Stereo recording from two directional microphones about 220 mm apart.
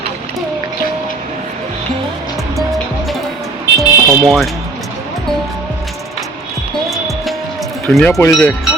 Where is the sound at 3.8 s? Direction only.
Centre (ahead or behind).